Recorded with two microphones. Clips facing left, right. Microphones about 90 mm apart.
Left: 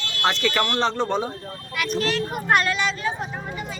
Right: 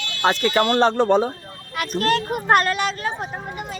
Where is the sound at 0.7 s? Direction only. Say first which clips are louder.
Right 6 dB; 45° right (ahead or behind).